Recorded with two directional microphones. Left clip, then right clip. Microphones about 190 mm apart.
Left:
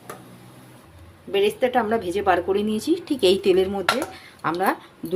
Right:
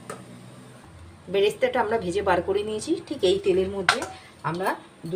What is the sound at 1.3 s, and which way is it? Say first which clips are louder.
A woman's voice: left 2 dB; 20° left (ahead or behind).